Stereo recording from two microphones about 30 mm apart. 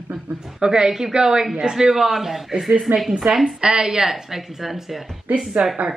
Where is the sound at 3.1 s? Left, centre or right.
Right.